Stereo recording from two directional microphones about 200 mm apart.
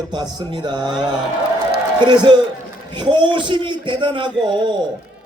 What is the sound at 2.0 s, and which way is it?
A man's voice, 25° right (ahead or behind).